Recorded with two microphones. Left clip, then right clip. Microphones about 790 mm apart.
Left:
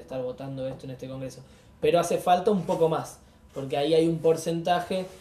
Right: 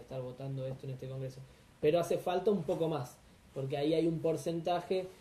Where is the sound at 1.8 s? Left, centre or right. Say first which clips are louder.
Left 7 dB; centre.